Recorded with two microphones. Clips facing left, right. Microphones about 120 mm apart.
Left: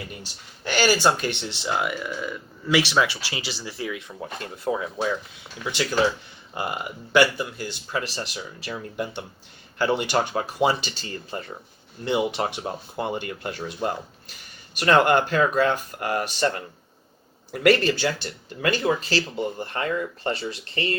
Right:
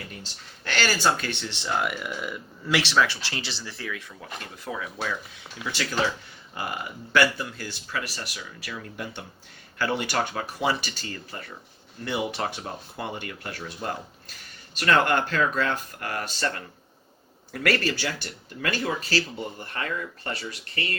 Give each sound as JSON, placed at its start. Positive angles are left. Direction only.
{"t": 0.2, "sound": "speech", "side_deg": 15}
{"t": 1.9, "sound": "speech", "side_deg": -5}
{"t": 4.2, "sound": "speech", "side_deg": 30}